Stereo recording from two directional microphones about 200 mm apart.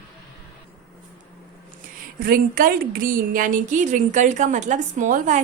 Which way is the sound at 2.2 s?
45° right (ahead or behind).